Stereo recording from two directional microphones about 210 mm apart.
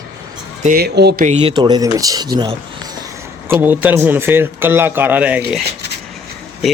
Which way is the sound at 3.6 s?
10° right (ahead or behind).